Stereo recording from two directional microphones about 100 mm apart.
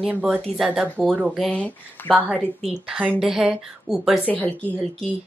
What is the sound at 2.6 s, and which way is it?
A woman's voice, 10° right (ahead or behind).